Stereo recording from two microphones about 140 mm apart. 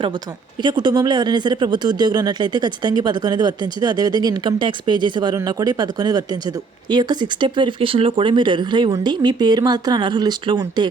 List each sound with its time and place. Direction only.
0.6 s speech: 30° right (ahead or behind)